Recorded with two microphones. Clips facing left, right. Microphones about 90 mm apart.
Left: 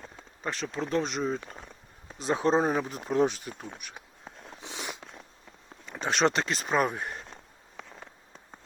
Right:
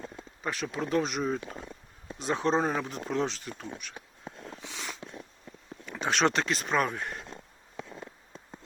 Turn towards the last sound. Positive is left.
turn(degrees=5)  # may be behind; listen again after turning